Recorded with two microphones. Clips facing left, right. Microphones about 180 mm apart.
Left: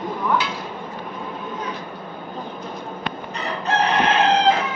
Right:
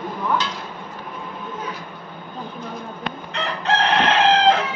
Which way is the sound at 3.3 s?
90° right.